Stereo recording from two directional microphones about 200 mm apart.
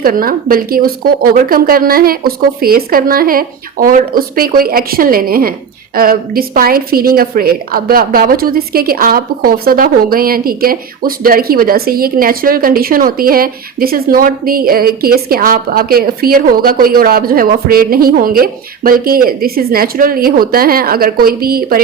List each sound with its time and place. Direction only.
0.0 s speech: 45° right (ahead or behind)